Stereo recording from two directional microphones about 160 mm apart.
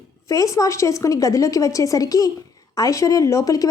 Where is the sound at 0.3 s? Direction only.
20° left (ahead or behind).